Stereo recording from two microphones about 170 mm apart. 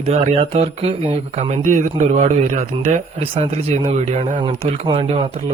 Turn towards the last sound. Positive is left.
turn(degrees=-35)  # may be behind; listen again after turning